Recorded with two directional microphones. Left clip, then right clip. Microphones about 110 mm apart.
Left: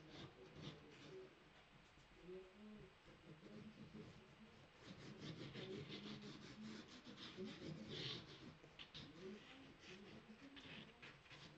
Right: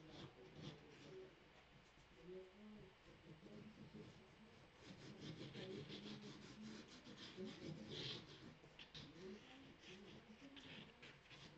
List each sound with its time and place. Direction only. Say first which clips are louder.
0.1 s rub: left 1 dB; 5° right (ahead or behind)
4.8 s sawing: left 1 dB; centre (ahead or behind)
9.8 s a sound: left 1 dB; centre (ahead or behind)